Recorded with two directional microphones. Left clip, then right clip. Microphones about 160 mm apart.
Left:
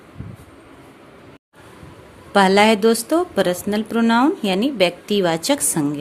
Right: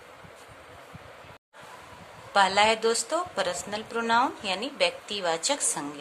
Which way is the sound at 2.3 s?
50° left (ahead or behind).